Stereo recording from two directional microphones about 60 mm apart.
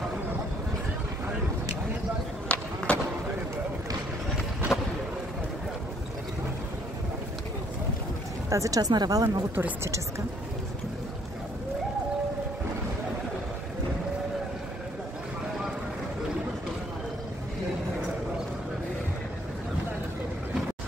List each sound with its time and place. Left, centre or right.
2.4 s run: centre
4.7 s a sound: centre
8.5 s a woman's voice: right